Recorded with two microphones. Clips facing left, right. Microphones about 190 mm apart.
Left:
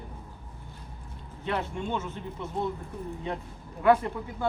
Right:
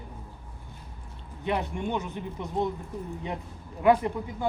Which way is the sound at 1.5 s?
15° right (ahead or behind).